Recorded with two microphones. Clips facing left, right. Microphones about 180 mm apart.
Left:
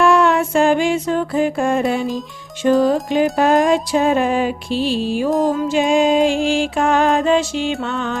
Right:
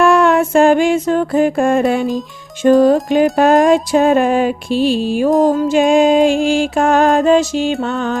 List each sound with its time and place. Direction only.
0.0 s music: 50° right (ahead or behind)